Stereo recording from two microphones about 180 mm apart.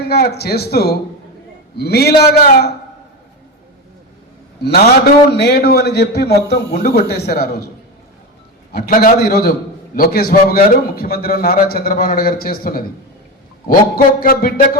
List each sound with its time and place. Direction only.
0.1 s a man's voice: 60° left (ahead or behind)
4.6 s a man's voice: 65° left (ahead or behind)
8.7 s a man's voice: 55° left (ahead or behind)
13.9 s speech: 55° left (ahead or behind)